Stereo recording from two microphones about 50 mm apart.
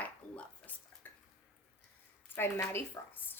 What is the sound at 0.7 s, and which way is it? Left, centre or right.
Speech, left.